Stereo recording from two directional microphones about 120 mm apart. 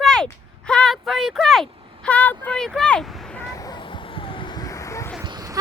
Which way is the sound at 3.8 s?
45° left (ahead or behind).